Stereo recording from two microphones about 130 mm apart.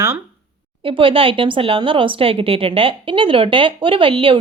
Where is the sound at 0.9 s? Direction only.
45° right (ahead or behind).